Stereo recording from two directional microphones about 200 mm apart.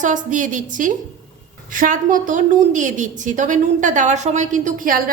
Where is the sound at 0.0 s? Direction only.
40° right (ahead or behind).